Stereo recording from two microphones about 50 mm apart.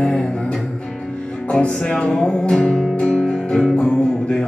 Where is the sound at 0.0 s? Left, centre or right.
Centre.